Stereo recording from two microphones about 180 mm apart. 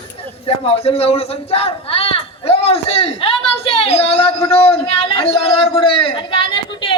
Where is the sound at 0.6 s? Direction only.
35° left (ahead or behind).